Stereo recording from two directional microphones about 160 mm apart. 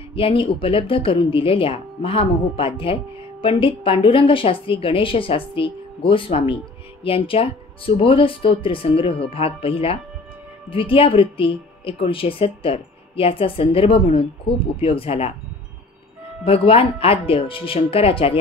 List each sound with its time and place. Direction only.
0.1 s speech: 35° left (ahead or behind)
16.4 s speech: 35° left (ahead or behind)